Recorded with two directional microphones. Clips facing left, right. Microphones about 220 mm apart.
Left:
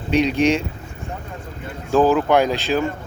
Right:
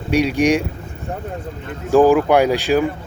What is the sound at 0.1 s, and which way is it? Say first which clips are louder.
Speech: right 1 dB; 10° right (ahead or behind).